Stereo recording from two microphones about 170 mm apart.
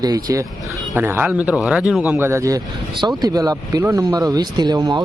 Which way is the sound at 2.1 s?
15° right (ahead or behind).